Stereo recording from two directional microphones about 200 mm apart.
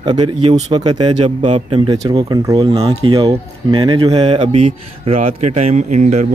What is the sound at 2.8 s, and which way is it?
Speech, 30° right (ahead or behind).